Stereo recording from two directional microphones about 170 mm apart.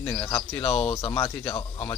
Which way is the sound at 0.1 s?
15° left (ahead or behind).